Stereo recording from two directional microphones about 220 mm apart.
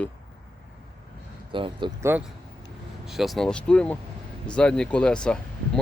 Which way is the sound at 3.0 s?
Centre (ahead or behind).